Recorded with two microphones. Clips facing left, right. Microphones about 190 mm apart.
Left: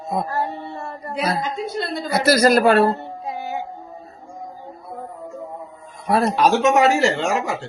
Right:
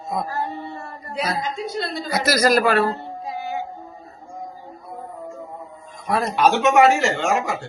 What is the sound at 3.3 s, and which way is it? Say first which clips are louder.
Music: even; 55° left (ahead or behind).